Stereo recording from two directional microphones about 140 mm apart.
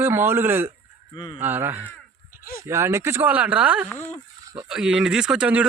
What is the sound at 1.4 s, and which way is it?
Speech, 15° right (ahead or behind).